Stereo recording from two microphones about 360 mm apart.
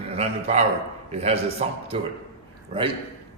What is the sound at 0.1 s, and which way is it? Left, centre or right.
A man's voice, centre.